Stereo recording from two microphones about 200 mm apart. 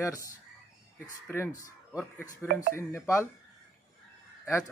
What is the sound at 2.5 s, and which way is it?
Speech, 40° right (ahead or behind).